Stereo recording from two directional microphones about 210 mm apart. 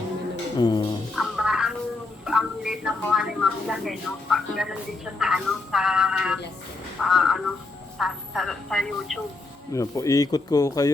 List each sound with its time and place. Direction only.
0.6 s music: 20° left (ahead or behind)
1.1 s music: centre (ahead or behind)
2.2 s a woman's voice: centre (ahead or behind)
9.7 s speech: 15° left (ahead or behind)